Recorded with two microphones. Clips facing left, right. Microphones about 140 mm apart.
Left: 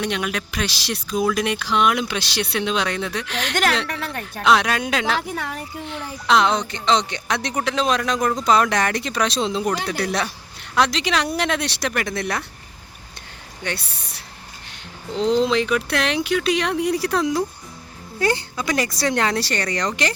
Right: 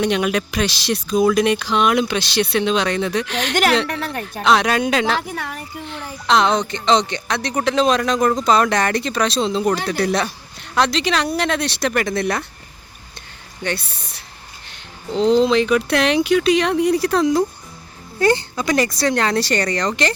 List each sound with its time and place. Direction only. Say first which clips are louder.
0.0 s speech: right 6 dB; centre (ahead or behind)
7.3 s speech: right 1 dB; 15° left (ahead or behind)
7.5 s speech: right 5 dB; 5° left (ahead or behind)
13.7 s speech: right 4 dB; 10° left (ahead or behind)
15.1 s speech: right 4 dB; 30° right (ahead or behind)
15.4 s speech: right 4 dB; centre (ahead or behind)